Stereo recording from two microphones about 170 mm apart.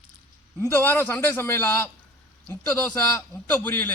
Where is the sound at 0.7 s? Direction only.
10° left (ahead or behind).